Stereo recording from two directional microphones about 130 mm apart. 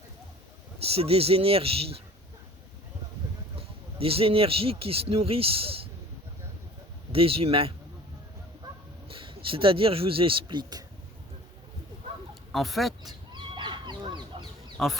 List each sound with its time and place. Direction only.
0.8 s a man's voice: 50° right (ahead or behind)
3.9 s a man's voice: 45° right (ahead or behind)
7.1 s a man's voice: 45° right (ahead or behind)
9.0 s speech: 45° right (ahead or behind)
12.3 s a sound: centre (ahead or behind)
13.3 s goose: 35° right (ahead or behind)
14.8 s speech: centre (ahead or behind)